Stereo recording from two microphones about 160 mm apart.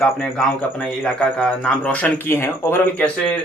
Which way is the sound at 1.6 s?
10° left (ahead or behind).